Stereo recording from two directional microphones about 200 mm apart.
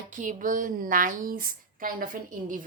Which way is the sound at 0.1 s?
40° right (ahead or behind).